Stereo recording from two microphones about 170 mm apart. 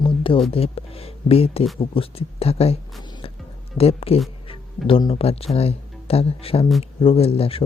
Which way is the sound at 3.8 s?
35° left (ahead or behind).